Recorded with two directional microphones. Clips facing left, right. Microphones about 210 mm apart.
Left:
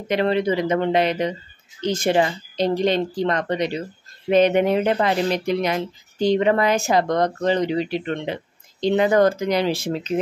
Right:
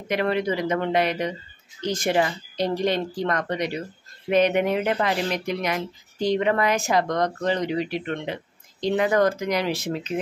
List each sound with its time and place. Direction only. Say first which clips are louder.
0.1 s speech: left 4 dB; 25° left (ahead or behind)